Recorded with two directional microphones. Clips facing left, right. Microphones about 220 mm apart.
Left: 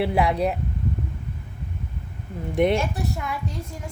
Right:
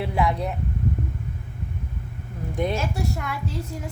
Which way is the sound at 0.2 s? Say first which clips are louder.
Even; 70° left (ahead or behind).